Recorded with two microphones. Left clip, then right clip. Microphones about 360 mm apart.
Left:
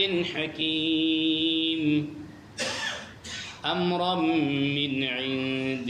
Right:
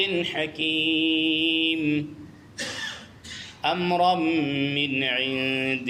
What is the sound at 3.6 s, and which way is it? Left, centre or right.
Mantra, right.